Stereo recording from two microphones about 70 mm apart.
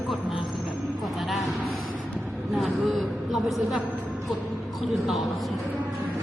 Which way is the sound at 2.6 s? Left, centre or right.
Centre.